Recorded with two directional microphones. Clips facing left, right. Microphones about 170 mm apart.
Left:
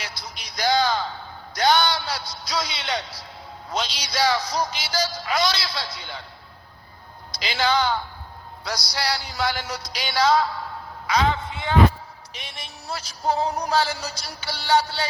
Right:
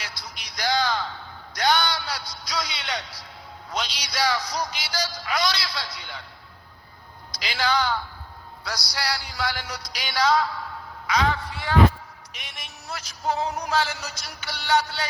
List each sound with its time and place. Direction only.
0.0 s a sound: 25° left (ahead or behind)
3.7 s a man's voice: 25° left (ahead or behind)
7.3 s a woman's voice: 25° left (ahead or behind)
8.6 s music: 20° left (ahead or behind)
12.3 s a man's voice: 30° left (ahead or behind)